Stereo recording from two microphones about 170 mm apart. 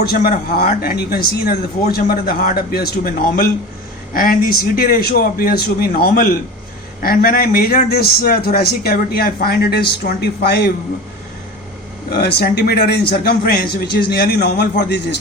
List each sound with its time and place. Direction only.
0.0 s a man's voice: 60° left (ahead or behind)
12.1 s a man's voice: 70° left (ahead or behind)